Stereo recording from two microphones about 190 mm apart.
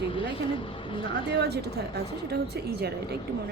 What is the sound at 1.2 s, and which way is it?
Speech, 60° right (ahead or behind).